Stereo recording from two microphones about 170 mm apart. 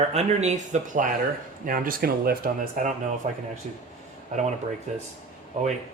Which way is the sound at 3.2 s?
40° right (ahead or behind).